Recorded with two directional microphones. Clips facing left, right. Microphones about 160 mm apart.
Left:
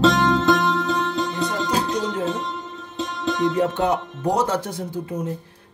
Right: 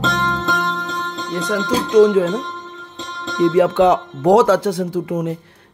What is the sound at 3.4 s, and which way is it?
Speech, 90° right.